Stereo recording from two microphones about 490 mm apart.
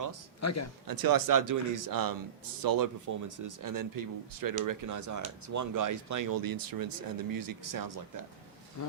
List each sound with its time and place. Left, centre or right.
0.4 s a man's voice: left
0.9 s speech: right
8.8 s speech: left